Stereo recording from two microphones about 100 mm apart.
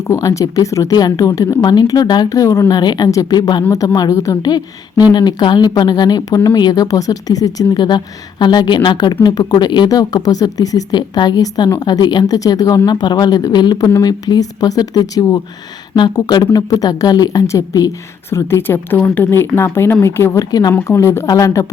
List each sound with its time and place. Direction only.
0.1 s speech: 35° left (ahead or behind)
4.1 s speech: 30° left (ahead or behind)
4.4 s speech: 45° left (ahead or behind); by 20.4 s 25° left (ahead or behind)
20.5 s speech: 40° left (ahead or behind)
20.8 s speech: 30° left (ahead or behind)